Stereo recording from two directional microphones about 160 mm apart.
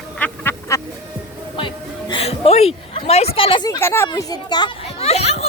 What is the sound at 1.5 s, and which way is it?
Music, 30° left (ahead or behind).